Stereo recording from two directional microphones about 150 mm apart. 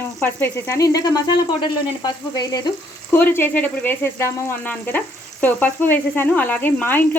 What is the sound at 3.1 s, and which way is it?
Speech, 15° left (ahead or behind).